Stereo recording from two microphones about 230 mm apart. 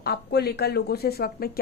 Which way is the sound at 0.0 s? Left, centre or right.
Left.